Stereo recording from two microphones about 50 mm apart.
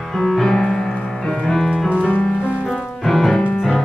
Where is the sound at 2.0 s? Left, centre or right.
Left.